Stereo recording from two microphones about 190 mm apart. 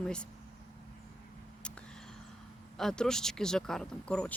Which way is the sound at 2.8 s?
5° left (ahead or behind).